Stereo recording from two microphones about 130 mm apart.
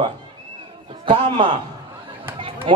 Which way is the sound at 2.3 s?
40° right (ahead or behind).